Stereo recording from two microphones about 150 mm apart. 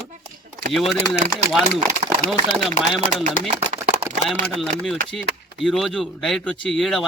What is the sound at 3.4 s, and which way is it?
Speech, 60° left (ahead or behind).